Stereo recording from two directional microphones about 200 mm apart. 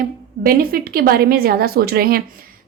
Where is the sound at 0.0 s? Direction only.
45° right (ahead or behind).